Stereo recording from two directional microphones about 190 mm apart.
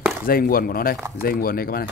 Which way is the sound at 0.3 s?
50° left (ahead or behind).